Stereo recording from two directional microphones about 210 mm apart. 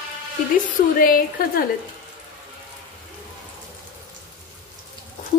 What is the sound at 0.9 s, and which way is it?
Speech, 45° left (ahead or behind).